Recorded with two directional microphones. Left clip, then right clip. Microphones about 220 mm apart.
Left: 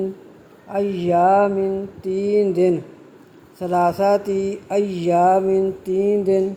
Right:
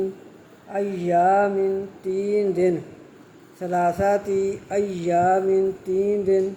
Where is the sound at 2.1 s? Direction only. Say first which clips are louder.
Left 4 dB; 30° left (ahead or behind).